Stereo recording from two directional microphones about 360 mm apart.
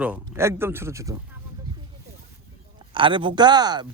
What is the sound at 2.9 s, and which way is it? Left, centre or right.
Speech, centre.